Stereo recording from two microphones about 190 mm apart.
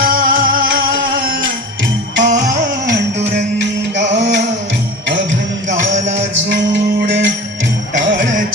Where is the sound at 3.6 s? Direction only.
65° right (ahead or behind).